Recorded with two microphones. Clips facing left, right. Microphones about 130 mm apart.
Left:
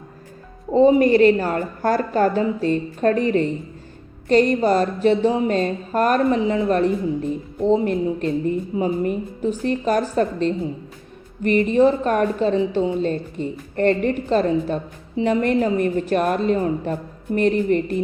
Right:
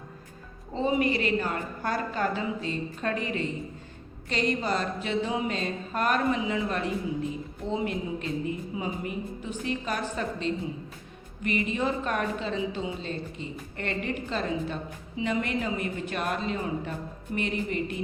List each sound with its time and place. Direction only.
0.7 s a woman's voice: 40° left (ahead or behind)